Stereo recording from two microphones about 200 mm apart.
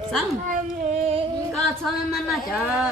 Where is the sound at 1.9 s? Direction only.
Centre (ahead or behind).